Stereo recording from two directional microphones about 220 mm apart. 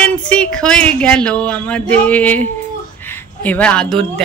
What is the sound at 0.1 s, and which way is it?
Speech, 5° left (ahead or behind).